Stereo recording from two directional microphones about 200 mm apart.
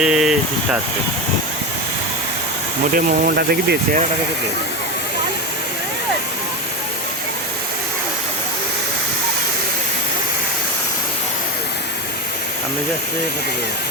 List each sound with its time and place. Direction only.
0.0 s speech: 5° right (ahead or behind)
2.9 s speech: 50° right (ahead or behind)